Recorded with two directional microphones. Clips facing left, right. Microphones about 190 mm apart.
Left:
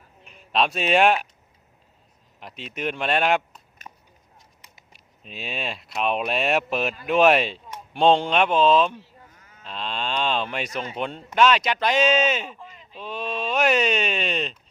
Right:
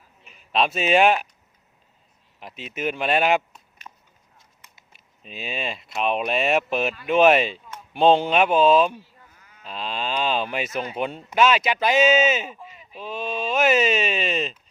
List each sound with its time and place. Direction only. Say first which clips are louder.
0.3 s speech: even; centre (ahead or behind)
2.4 s speech: right 2 dB; centre (ahead or behind)
3.9 s a sound: left 1 dB; 20° left (ahead or behind)
4.9 s speech: right 1 dB; centre (ahead or behind)